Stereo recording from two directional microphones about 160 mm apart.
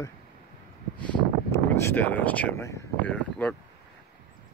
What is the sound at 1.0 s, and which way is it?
Speech, 15° left (ahead or behind).